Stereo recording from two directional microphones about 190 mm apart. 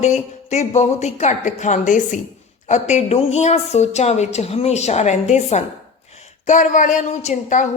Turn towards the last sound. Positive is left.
turn(degrees=40)  # may be behind; listen again after turning